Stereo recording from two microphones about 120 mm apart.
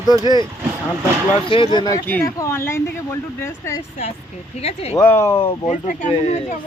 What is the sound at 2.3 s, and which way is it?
Speech, 20° left (ahead or behind).